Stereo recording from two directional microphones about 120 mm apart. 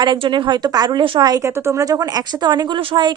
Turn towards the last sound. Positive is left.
turn(degrees=-40)  # may be behind; listen again after turning